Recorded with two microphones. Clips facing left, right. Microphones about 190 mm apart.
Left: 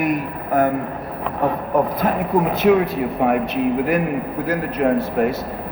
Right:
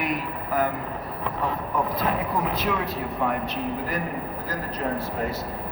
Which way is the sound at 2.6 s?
60° left (ahead or behind).